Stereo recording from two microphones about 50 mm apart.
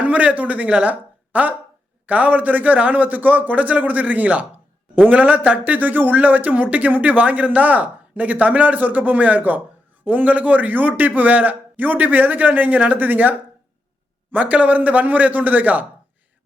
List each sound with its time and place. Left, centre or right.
0.0 s speech: right
14.3 s speech: right